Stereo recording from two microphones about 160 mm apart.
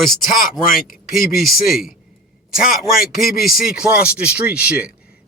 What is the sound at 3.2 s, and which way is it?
Speech, 65° left (ahead or behind).